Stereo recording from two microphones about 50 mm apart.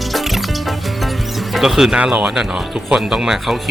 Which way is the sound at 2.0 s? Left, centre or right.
Right.